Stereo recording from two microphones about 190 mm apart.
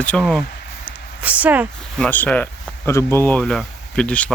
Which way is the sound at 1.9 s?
5° left (ahead or behind).